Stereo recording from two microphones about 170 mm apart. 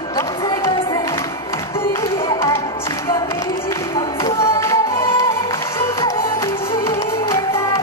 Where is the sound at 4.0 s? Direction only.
20° left (ahead or behind).